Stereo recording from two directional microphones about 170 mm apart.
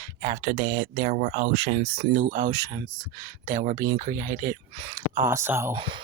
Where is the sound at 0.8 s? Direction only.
55° right (ahead or behind).